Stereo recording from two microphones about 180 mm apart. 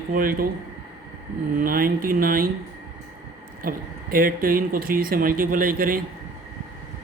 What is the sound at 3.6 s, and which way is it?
Speech, 50° right (ahead or behind).